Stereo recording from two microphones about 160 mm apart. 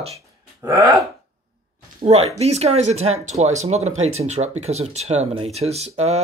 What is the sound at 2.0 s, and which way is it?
Speech, 40° right (ahead or behind).